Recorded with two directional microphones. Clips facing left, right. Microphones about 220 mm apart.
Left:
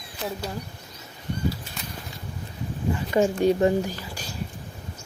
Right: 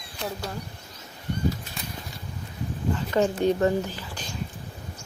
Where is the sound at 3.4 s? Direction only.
15° left (ahead or behind).